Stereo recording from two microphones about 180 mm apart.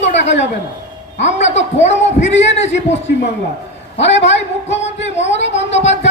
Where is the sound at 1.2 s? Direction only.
40° left (ahead or behind).